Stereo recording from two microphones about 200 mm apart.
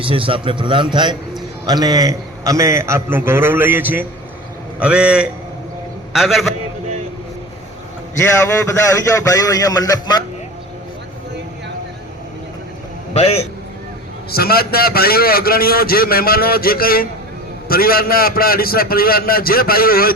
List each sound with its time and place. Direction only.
0.0 s a man's voice: 25° right (ahead or behind); by 6.5 s centre (ahead or behind)
8.2 s a man's voice: 15° left (ahead or behind)
13.1 s a man's voice: 30° left (ahead or behind)
14.3 s a man's voice: 50° left (ahead or behind)